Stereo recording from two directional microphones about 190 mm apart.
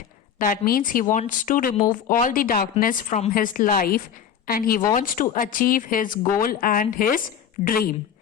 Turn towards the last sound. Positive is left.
turn(degrees=50)  # may be behind; listen again after turning